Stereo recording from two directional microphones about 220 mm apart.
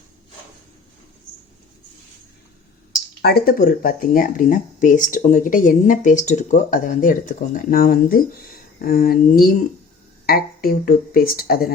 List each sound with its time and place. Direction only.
3.2 s speech: 45° left (ahead or behind)